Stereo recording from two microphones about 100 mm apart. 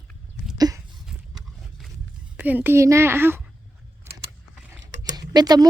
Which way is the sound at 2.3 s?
15° right (ahead or behind).